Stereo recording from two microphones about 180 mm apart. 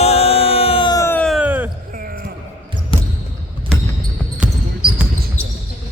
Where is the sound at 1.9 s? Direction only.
50° right (ahead or behind).